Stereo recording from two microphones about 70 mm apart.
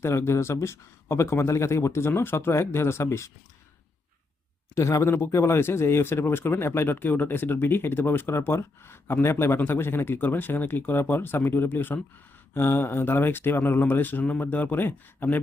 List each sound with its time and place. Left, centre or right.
0.0 s a man's voice: left
4.7 s a man's voice: left